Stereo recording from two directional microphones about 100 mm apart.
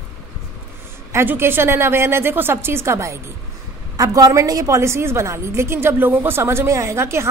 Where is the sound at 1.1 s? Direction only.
25° right (ahead or behind).